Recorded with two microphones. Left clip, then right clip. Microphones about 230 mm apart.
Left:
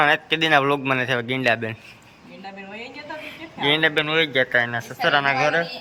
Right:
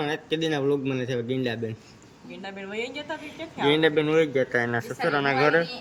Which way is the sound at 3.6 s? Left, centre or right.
Centre.